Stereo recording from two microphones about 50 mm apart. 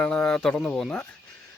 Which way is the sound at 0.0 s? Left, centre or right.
Centre.